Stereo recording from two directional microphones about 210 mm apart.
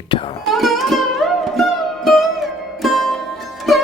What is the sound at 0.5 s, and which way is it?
Music, centre (ahead or behind).